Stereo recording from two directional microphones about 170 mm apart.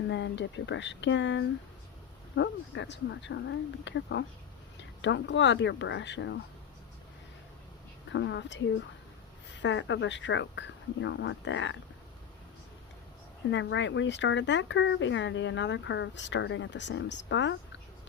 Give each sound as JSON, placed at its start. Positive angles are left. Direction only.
{"t": 0.1, "sound": "speech", "side_deg": 90}
{"t": 8.1, "sound": "speech", "side_deg": 90}
{"t": 13.5, "sound": "speech", "side_deg": 90}